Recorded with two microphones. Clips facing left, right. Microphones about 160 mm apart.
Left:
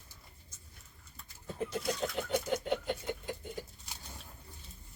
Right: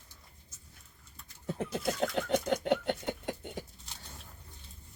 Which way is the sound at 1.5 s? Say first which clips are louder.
Right 2 dB; 75° right (ahead or behind).